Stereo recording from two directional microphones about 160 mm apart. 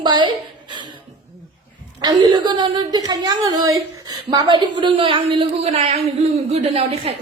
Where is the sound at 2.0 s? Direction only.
25° right (ahead or behind).